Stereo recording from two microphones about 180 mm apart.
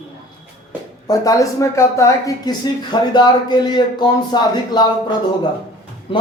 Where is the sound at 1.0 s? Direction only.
20° left (ahead or behind).